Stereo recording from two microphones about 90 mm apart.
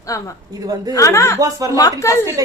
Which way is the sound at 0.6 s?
45° right (ahead or behind).